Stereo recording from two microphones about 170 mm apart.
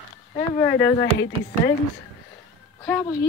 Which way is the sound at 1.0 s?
70° left (ahead or behind).